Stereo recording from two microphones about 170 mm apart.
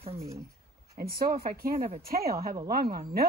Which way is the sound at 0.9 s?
60° right (ahead or behind).